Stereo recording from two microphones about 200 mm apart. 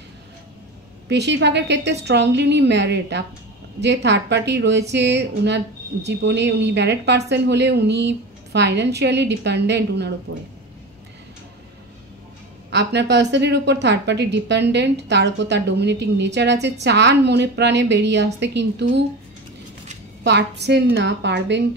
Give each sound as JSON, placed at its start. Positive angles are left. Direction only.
{"t": 1.0, "sound": "a woman's voice", "side_deg": -60}
{"t": 12.7, "sound": "a woman's voice", "side_deg": -60}
{"t": 20.2, "sound": "a woman's voice", "side_deg": -60}